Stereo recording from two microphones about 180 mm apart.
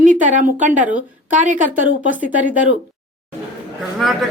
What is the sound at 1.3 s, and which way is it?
Speech, 45° right (ahead or behind).